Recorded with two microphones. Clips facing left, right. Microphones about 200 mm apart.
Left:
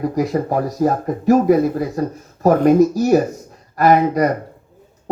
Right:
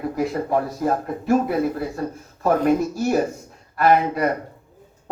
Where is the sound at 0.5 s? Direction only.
40° left (ahead or behind).